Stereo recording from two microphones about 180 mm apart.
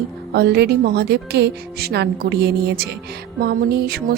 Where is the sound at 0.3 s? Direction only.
65° right (ahead or behind).